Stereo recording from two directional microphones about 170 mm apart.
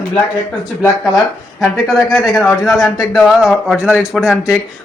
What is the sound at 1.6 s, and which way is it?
Speech, centre (ahead or behind).